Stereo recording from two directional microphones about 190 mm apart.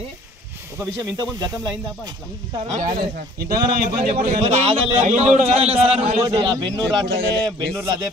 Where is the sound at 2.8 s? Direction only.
50° right (ahead or behind).